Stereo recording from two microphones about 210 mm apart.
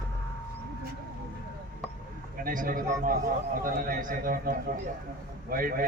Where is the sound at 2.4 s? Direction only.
40° right (ahead or behind).